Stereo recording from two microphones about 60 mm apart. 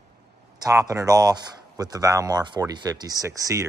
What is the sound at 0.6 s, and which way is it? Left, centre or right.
Speech, right.